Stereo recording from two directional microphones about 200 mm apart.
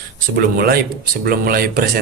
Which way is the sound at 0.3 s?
50° right (ahead or behind).